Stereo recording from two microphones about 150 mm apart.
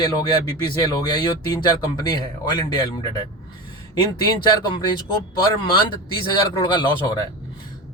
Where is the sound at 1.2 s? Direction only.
30° left (ahead or behind).